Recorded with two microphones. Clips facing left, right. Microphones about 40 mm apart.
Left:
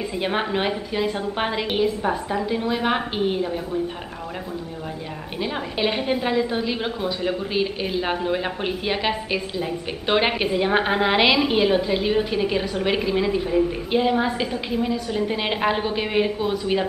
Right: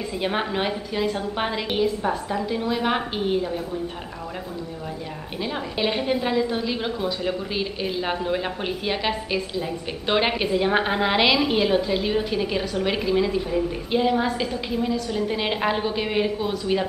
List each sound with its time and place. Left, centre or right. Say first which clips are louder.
0.2 s a woman's voice: left 1 dB; centre
5.4 s a woman's voice: left 1 dB; centre